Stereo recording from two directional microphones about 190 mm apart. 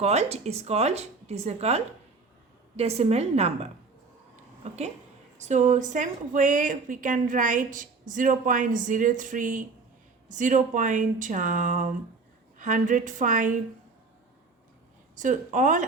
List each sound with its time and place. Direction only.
0.0 s speech: 35° right (ahead or behind)
5.4 s speech: 40° right (ahead or behind)
15.1 s speech: 40° right (ahead or behind)